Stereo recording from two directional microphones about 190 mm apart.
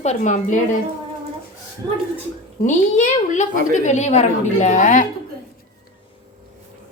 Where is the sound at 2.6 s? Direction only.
40° left (ahead or behind).